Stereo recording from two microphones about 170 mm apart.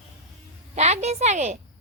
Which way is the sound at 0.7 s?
40° right (ahead or behind).